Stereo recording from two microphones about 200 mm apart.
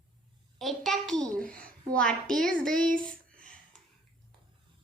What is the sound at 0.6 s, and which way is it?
A woman's voice, centre (ahead or behind).